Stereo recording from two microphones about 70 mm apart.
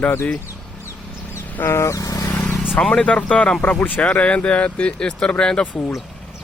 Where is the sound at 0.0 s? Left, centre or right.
Left.